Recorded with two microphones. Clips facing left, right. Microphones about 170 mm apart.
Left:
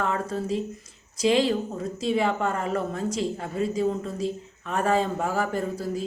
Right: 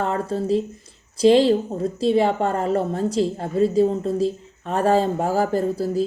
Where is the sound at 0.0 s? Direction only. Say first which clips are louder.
Right 4 dB; 30° right (ahead or behind).